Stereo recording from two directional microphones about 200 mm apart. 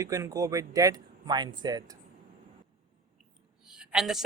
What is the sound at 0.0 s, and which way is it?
Speech, 15° right (ahead or behind).